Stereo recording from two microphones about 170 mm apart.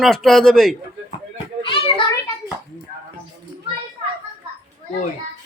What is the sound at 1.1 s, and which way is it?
Children playing, 30° left (ahead or behind).